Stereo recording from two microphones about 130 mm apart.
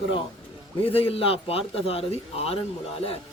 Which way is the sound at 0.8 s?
45° left (ahead or behind).